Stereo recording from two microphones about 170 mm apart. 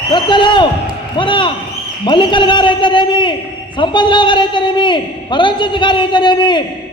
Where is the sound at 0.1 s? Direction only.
30° left (ahead or behind).